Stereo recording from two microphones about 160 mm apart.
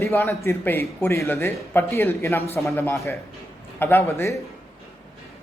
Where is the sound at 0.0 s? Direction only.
15° left (ahead or behind).